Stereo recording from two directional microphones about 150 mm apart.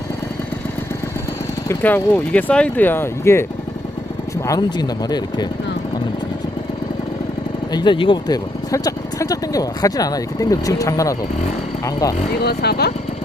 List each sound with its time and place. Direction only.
1.6 s speech: 15° left (ahead or behind)
4.4 s speech: 25° left (ahead or behind)
7.7 s speech: 30° left (ahead or behind)
12.4 s speech: 90° left